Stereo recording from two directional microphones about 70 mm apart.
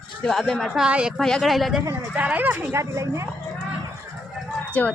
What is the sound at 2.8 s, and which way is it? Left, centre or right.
Speech, right.